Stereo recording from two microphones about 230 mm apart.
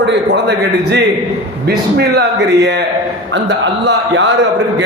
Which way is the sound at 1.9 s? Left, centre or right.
Right.